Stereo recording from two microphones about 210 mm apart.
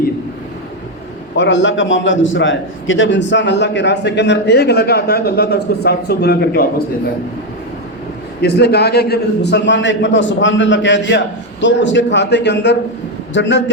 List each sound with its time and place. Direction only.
1.4 s a man's voice: 60° left (ahead or behind)
8.4 s a man's voice: 50° left (ahead or behind)